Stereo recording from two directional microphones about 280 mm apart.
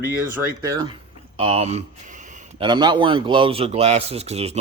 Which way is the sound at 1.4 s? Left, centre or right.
Right.